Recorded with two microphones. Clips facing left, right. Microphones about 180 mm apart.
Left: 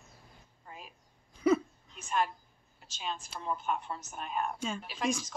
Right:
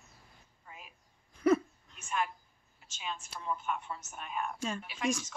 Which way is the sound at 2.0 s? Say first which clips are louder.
Left 3 dB; 35° left (ahead or behind).